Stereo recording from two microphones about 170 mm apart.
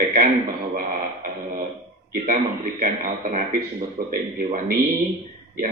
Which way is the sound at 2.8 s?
50° right (ahead or behind).